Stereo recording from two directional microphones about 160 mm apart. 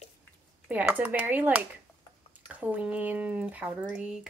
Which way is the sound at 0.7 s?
10° right (ahead or behind).